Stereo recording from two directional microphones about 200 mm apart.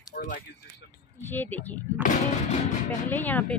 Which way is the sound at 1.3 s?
10° left (ahead or behind).